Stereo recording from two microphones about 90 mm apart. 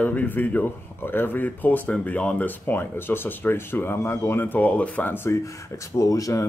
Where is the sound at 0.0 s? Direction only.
20° left (ahead or behind).